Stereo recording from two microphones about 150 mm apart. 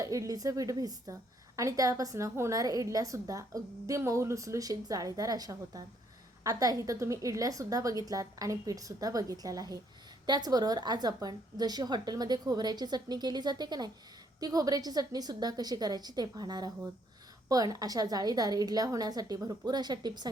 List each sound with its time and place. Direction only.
0.0 s a woman's voice: 20° right (ahead or behind)